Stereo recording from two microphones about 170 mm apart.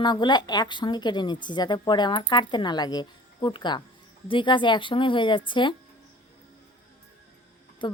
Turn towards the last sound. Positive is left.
turn(degrees=30)  # may be behind; listen again after turning